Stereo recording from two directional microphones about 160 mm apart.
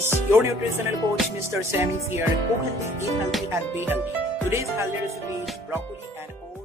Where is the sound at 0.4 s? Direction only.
15° right (ahead or behind).